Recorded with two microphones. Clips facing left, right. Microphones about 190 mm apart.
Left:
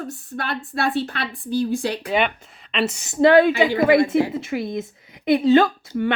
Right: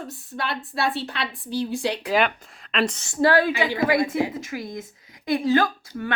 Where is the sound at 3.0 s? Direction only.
20° left (ahead or behind).